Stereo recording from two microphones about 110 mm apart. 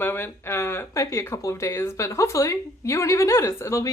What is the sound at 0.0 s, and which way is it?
Speech, 20° left (ahead or behind).